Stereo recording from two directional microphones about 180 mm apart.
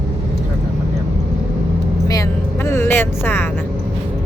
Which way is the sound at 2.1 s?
15° left (ahead or behind).